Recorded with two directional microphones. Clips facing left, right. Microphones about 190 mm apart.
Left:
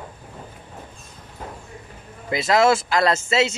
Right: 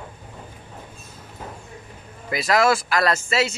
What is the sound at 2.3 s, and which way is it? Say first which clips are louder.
A man's voice: left 2 dB; 25° left (ahead or behind).